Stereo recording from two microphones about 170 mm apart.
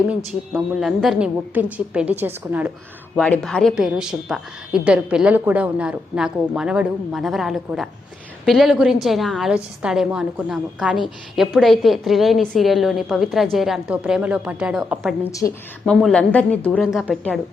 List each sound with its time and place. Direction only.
0.3 s a woman's voice: centre (ahead or behind)
3.2 s a woman's voice: 10° left (ahead or behind)
15.2 s a woman's voice: 20° left (ahead or behind)
15.9 s a woman's voice: centre (ahead or behind)